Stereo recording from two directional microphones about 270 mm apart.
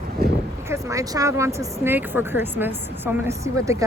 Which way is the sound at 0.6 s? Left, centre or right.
Centre.